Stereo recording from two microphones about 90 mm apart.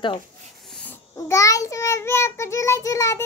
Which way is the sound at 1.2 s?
35° left (ahead or behind).